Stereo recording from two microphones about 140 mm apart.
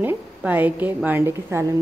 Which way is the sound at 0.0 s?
15° right (ahead or behind).